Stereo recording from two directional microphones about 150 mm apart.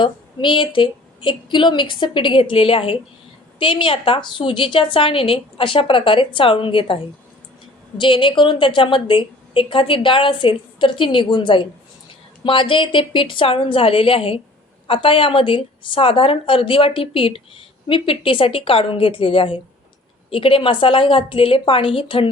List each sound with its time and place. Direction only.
0.0 s a woman's voice: 30° left (ahead or behind)